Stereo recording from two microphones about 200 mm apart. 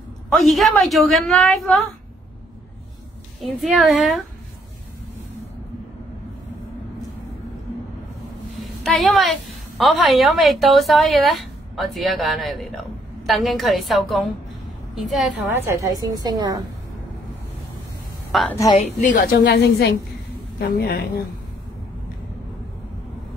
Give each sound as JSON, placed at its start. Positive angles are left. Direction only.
{"t": 0.3, "sound": "a woman's voice", "side_deg": 0}
{"t": 3.3, "sound": "a woman's voice", "side_deg": 0}
{"t": 8.5, "sound": "a woman's voice", "side_deg": 0}
{"t": 15.5, "sound": "a woman's voice", "side_deg": -15}
{"t": 18.3, "sound": "a woman's voice", "side_deg": 0}
{"t": 18.9, "sound": "a woman's voice", "side_deg": 45}